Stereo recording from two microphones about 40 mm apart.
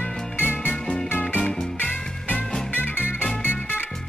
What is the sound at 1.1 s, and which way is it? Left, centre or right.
Music, left.